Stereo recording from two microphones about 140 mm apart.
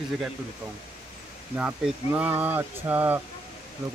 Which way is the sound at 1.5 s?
10° right (ahead or behind).